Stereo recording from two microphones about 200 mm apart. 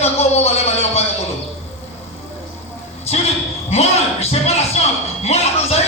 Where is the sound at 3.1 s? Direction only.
30° left (ahead or behind).